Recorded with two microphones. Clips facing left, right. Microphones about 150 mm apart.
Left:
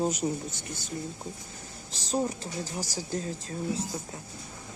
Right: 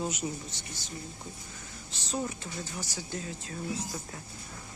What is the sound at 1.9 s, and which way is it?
Speech, 40° left (ahead or behind).